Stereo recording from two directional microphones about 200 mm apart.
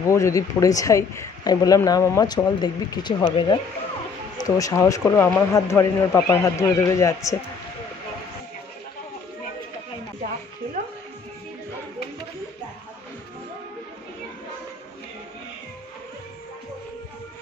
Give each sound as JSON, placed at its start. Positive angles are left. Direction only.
{"t": 0.1, "sound": "speech", "side_deg": 15}